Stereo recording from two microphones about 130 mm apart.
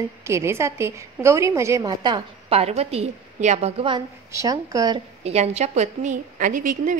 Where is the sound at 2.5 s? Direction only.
55° right (ahead or behind).